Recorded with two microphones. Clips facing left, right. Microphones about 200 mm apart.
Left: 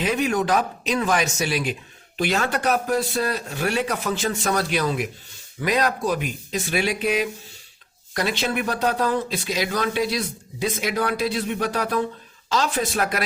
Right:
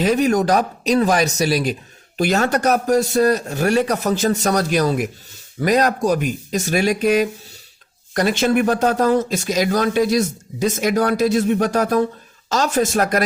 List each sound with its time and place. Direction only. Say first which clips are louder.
0.0 s speech: right 6 dB; 40° right (ahead or behind)